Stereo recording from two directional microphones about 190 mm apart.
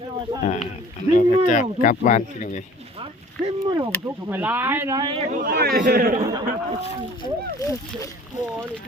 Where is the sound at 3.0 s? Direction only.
30° right (ahead or behind).